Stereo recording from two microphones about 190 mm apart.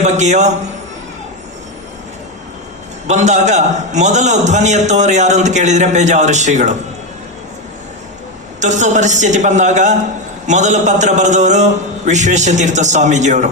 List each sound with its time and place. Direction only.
0.0 s a man's voice: 35° right (ahead or behind)
3.1 s a man's voice: 40° right (ahead or behind)
8.6 s a man's voice: 40° right (ahead or behind)